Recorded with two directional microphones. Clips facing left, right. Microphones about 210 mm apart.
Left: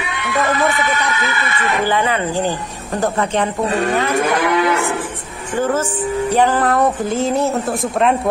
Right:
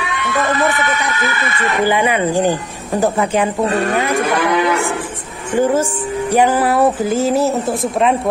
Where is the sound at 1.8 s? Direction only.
15° right (ahead or behind).